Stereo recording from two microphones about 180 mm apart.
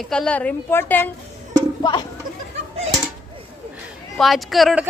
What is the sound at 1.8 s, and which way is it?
Speech, 25° left (ahead or behind).